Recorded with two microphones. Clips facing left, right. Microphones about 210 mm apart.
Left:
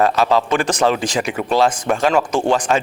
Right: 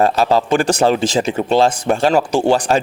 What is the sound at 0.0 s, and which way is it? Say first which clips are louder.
Speech: right 1 dB; 35° right (ahead or behind).